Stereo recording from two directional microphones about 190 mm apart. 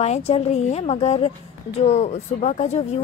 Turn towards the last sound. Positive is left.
turn(degrees=35)  # may be behind; listen again after turning